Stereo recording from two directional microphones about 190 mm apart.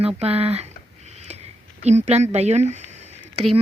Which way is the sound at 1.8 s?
35° right (ahead or behind).